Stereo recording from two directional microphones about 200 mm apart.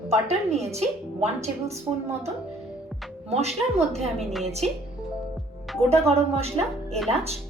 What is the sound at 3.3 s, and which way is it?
Speech, 30° right (ahead or behind).